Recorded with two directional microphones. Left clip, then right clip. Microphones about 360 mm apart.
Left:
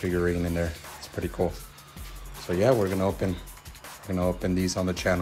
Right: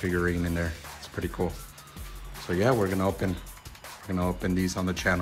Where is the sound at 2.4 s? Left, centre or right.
Centre.